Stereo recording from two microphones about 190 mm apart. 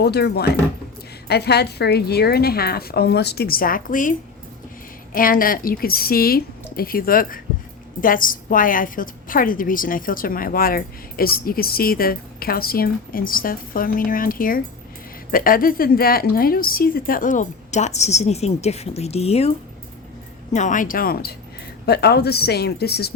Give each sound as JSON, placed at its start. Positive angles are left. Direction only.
{"t": 0.0, "sound": "a woman's voice", "side_deg": 60}
{"t": 5.1, "sound": "a woman's voice", "side_deg": 50}